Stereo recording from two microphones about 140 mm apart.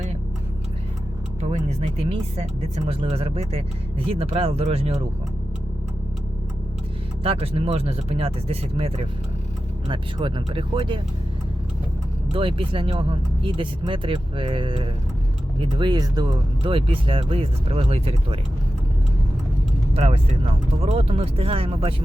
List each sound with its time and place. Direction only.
1.4 s speech: 50° right (ahead or behind)
7.3 s speech: 45° right (ahead or behind)
9.9 s speech: 35° right (ahead or behind)
12.3 s speech: 40° right (ahead or behind)
19.9 s speech: 45° right (ahead or behind)